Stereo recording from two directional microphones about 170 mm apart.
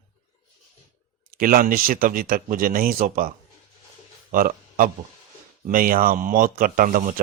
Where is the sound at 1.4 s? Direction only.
55° right (ahead or behind).